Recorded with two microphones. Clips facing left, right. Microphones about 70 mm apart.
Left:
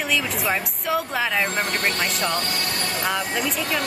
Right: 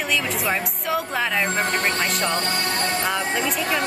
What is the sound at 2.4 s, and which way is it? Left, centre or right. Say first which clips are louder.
Music: right 3 dB; right.